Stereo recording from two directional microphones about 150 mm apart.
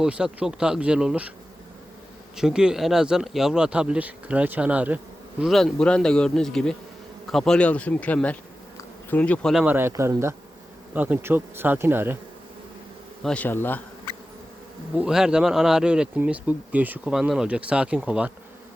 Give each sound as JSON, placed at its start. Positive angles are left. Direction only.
{"t": 0.0, "sound": "speech", "side_deg": -5}
{"t": 2.3, "sound": "speech", "side_deg": -5}
{"t": 5.4, "sound": "speech", "side_deg": 0}
{"t": 9.6, "sound": "speech", "side_deg": -15}
{"t": 13.2, "sound": "speech", "side_deg": 10}
{"t": 14.9, "sound": "speech", "side_deg": -5}